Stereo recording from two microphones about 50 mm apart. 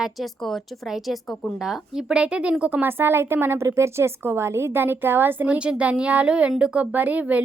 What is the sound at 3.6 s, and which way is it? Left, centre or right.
A woman's voice, right.